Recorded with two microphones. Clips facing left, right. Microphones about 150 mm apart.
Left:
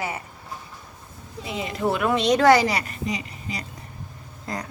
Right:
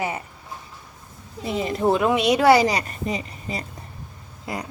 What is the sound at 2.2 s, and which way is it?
Speech, 5° right (ahead or behind).